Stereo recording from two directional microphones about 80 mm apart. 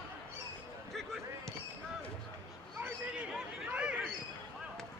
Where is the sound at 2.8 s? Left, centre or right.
Centre.